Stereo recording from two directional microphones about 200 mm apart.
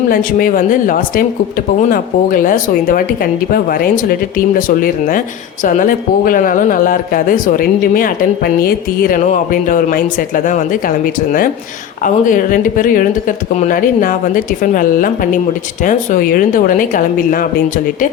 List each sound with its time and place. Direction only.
0.1 s speech: 45° left (ahead or behind)